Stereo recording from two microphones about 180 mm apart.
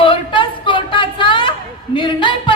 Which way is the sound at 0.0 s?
30° left (ahead or behind).